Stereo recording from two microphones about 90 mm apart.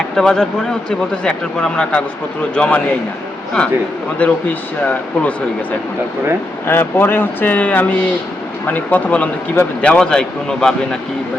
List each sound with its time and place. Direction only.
0.2 s speech: 5° left (ahead or behind)
4.2 s speech: 15° left (ahead or behind)
6.7 s speech: 25° left (ahead or behind); by 10.8 s 10° left (ahead or behind)